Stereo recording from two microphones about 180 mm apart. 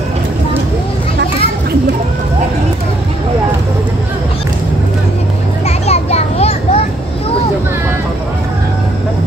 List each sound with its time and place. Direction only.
5.9 s children playing: 35° left (ahead or behind)